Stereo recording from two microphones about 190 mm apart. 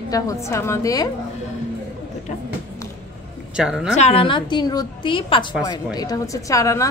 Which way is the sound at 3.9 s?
30° left (ahead or behind).